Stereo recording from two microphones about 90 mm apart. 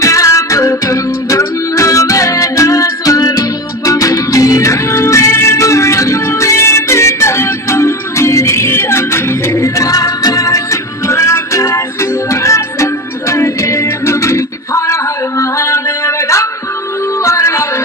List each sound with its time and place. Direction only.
0.0 s music: 35° left (ahead or behind)